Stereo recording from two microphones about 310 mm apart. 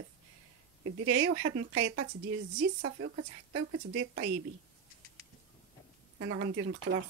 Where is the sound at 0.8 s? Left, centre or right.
Right.